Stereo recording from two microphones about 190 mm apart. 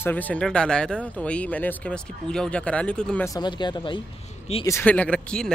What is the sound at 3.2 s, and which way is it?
Speech, 20° left (ahead or behind).